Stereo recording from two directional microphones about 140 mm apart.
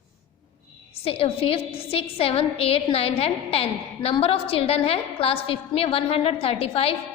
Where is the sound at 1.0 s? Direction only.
45° left (ahead or behind).